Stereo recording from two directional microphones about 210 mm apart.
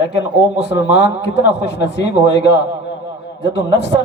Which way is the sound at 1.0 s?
55° left (ahead or behind).